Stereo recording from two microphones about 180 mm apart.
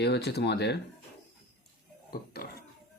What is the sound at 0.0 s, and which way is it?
Speech, 65° left (ahead or behind).